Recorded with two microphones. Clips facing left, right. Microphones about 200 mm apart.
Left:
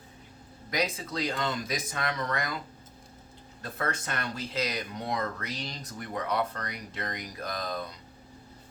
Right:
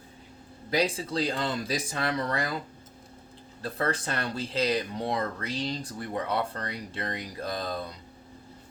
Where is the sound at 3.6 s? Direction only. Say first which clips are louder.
Right 4 dB; 30° right (ahead or behind).